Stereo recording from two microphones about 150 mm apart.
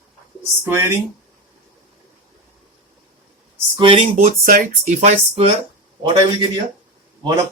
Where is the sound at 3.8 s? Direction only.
35° right (ahead or behind).